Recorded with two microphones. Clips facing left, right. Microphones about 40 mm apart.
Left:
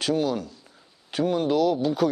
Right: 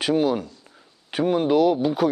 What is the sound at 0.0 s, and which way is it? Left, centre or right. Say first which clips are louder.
Speech: right 3 dB; centre.